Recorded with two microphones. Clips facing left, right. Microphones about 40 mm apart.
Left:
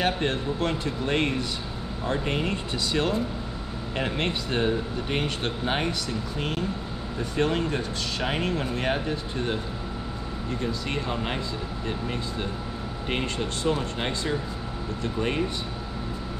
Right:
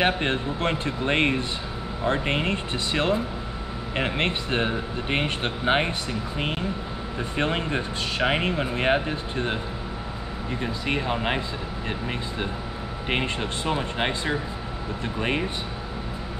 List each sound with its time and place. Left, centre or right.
0.0 s speech: right
13.1 s speech: right